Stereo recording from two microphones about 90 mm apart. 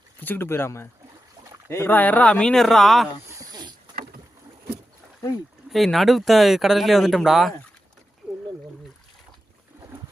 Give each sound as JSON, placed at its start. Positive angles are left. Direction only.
{"t": 0.2, "sound": "speech", "side_deg": 20}
{"t": 3.5, "sound": "boat", "side_deg": -50}
{"t": 5.6, "sound": "speech", "side_deg": 0}